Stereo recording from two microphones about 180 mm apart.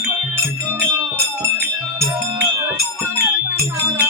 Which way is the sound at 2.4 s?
10° right (ahead or behind).